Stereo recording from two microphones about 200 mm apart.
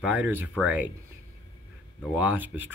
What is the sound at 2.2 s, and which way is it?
Speech, 10° right (ahead or behind).